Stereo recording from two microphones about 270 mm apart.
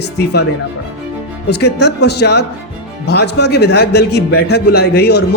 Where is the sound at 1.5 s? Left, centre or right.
Left.